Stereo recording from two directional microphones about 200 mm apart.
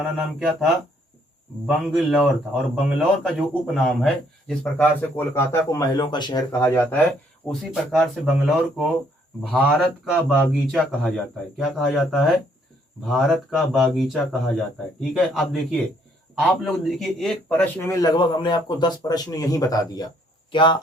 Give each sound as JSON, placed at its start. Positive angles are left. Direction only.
{"t": 0.0, "sound": "speech", "side_deg": 0}
{"t": 16.5, "sound": "a man's voice", "side_deg": 0}